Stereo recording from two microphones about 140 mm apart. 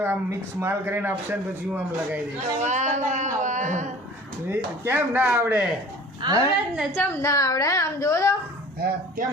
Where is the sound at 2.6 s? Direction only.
55° right (ahead or behind).